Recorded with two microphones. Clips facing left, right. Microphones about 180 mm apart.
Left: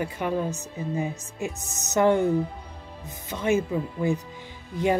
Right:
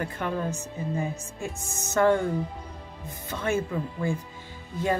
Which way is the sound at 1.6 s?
10° right (ahead or behind).